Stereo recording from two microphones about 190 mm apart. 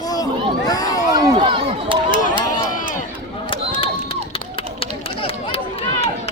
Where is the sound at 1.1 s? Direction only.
25° right (ahead or behind).